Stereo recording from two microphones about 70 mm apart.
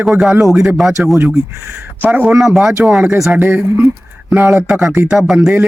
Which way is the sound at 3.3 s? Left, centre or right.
Right.